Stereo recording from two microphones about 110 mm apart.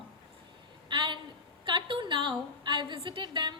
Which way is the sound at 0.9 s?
50° right (ahead or behind).